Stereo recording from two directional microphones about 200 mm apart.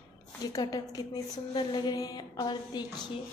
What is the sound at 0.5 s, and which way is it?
A woman's voice, 20° left (ahead or behind).